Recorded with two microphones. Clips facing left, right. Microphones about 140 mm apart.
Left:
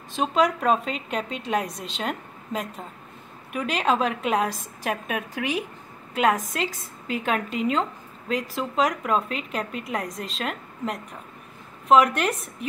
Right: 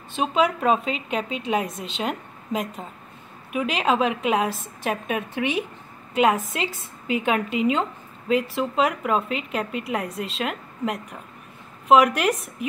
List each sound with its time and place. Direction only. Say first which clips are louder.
0.1 s a woman's voice: even; 5° right (ahead or behind)